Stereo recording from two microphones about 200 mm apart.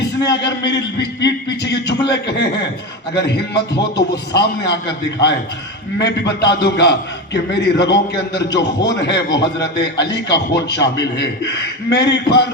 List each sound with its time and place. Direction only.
0.0 s a man's voice: 60° left (ahead or behind)
3.9 s a man's voice: 60° left (ahead or behind)